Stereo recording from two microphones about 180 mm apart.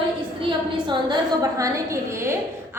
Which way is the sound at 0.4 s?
25° right (ahead or behind).